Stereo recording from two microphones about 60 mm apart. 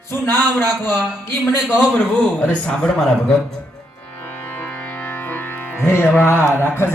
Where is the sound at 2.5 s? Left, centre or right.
Centre.